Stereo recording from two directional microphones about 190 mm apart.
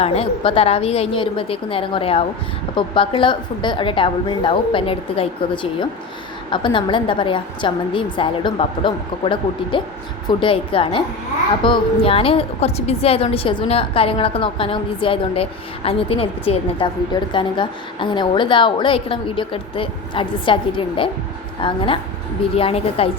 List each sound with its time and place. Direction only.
0.0 s a woman's voice: 30° left (ahead or behind)
6.5 s a woman's voice: 25° left (ahead or behind)